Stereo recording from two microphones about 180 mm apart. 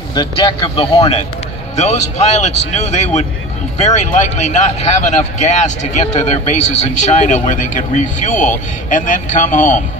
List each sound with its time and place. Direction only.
0.1 s speech: 25° left (ahead or behind); by 9.8 s 45° left (ahead or behind)